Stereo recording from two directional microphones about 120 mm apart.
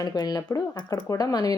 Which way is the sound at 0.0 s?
35° left (ahead or behind).